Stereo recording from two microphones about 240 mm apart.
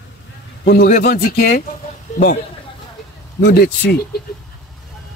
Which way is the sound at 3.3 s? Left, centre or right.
Left.